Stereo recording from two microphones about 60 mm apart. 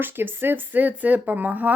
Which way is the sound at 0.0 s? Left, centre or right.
Right.